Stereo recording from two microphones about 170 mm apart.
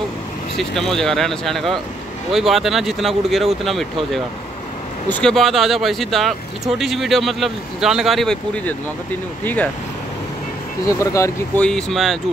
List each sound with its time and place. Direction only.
0.6 s speech: centre (ahead or behind)
5.1 s speech: 5° left (ahead or behind)
11.0 s speech: 15° left (ahead or behind)
11.6 s speech: centre (ahead or behind)